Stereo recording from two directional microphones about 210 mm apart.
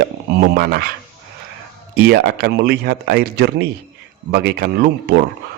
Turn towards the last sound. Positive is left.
turn(degrees=-50)  # may be behind; listen again after turning